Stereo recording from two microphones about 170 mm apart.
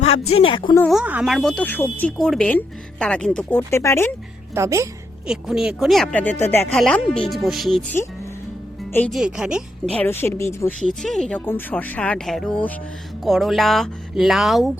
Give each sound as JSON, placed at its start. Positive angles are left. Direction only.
{"t": 0.0, "sound": "speech", "side_deg": 35}
{"t": 0.9, "sound": "speech", "side_deg": -5}
{"t": 3.7, "sound": "a woman's voice", "side_deg": 15}
{"t": 4.5, "sound": "a woman's voice", "side_deg": -15}
{"t": 5.2, "sound": "speech", "side_deg": -5}
{"t": 9.0, "sound": "speech", "side_deg": -5}
{"t": 9.9, "sound": "a woman's voice", "side_deg": 10}
{"t": 10.8, "sound": "a woman's voice", "side_deg": 0}